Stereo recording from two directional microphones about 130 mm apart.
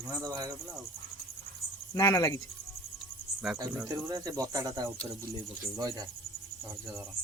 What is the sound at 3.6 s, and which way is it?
Speech, 25° right (ahead or behind).